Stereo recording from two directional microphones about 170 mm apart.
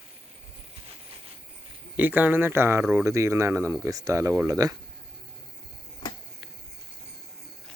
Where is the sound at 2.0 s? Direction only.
10° right (ahead or behind).